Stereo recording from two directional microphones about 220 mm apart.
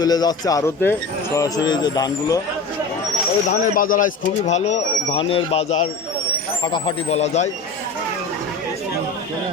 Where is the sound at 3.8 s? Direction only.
40° left (ahead or behind).